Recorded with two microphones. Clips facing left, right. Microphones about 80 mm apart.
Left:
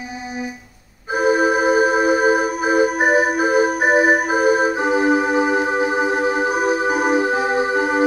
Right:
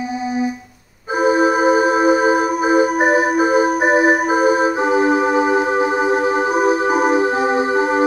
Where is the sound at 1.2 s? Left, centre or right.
Centre.